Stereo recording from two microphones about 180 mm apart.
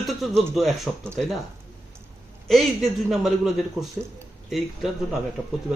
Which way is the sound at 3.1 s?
Centre (ahead or behind).